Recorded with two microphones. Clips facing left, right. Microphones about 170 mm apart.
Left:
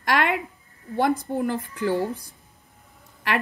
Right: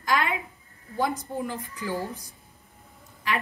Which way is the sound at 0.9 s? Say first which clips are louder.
Left 5 dB; 65° left (ahead or behind).